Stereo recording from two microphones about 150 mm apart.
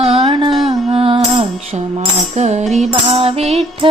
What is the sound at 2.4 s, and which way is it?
Music, 50° right (ahead or behind).